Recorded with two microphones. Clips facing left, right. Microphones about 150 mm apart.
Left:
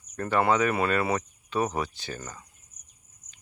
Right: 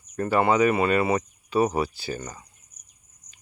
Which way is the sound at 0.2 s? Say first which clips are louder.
Right 3 dB; 5° right (ahead or behind).